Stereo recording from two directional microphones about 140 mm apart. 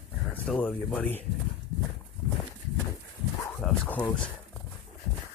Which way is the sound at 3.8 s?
10° left (ahead or behind).